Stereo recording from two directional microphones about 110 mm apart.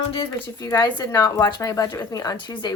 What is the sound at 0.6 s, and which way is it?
Speech, 35° left (ahead or behind).